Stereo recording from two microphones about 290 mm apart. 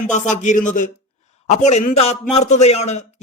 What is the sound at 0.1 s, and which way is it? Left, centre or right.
Speech, left.